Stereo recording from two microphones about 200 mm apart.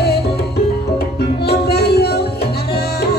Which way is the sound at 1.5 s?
55° left (ahead or behind).